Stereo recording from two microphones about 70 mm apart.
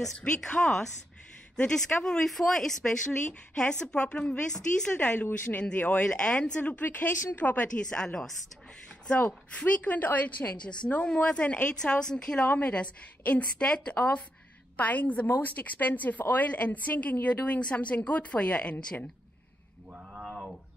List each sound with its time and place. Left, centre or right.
0.3 s speech: centre
4.9 s a woman's voice: left
19.9 s a sound: centre